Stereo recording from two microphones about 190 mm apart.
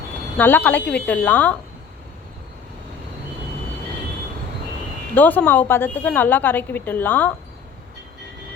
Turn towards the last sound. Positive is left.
turn(degrees=10)  # may be behind; listen again after turning